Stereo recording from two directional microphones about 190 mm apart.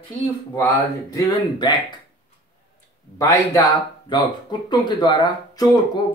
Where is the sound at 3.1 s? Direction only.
20° left (ahead or behind).